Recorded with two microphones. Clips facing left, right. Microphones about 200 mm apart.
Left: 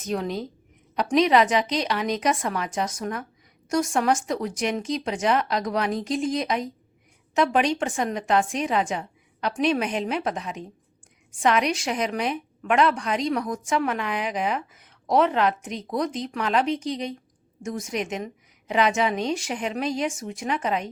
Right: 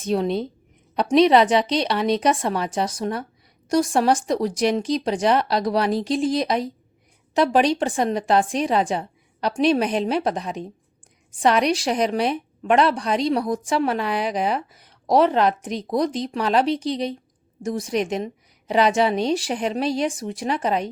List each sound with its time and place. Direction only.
0.0 s a woman's voice: 30° right (ahead or behind)